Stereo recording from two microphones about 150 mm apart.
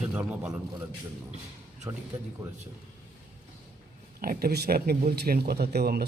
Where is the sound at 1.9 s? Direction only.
20° right (ahead or behind).